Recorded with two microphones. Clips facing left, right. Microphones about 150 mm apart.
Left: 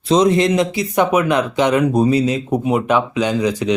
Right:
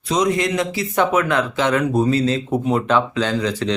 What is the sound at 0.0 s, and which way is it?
Speech, 30° left (ahead or behind).